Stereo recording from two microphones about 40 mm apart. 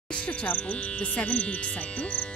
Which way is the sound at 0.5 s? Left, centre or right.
Left.